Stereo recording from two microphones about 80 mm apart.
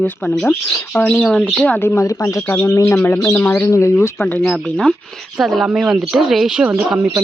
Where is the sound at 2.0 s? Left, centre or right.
Left.